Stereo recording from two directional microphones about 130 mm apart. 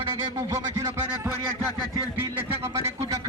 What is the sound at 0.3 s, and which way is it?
Speech, 25° right (ahead or behind).